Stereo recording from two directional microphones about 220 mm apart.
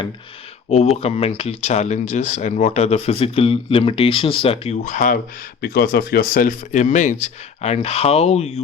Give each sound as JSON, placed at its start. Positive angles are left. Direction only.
{"t": 1.0, "sound": "speech", "side_deg": 25}